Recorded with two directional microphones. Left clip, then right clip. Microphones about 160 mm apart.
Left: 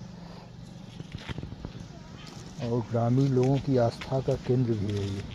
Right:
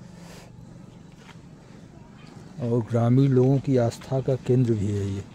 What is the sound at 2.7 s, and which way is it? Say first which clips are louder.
Speech: right 4 dB; 90° right.